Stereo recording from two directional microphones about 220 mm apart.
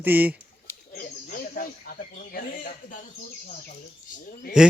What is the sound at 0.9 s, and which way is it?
Bird, 40° left (ahead or behind).